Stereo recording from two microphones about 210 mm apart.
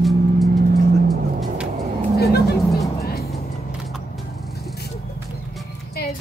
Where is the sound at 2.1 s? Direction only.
50° left (ahead or behind).